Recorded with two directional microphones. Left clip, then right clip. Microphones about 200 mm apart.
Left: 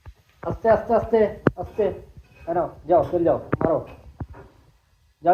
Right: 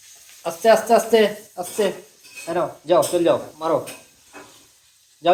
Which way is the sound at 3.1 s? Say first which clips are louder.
Right 2 dB; 10° right (ahead or behind).